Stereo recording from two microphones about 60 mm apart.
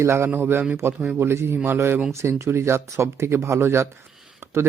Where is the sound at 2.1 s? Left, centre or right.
Right.